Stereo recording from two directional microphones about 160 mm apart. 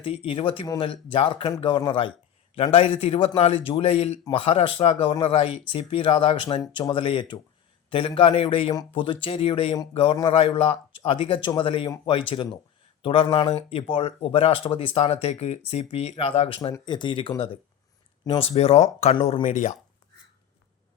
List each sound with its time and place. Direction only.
0.0 s speech: 35° left (ahead or behind)